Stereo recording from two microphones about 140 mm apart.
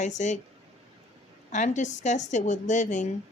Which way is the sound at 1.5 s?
60° left (ahead or behind).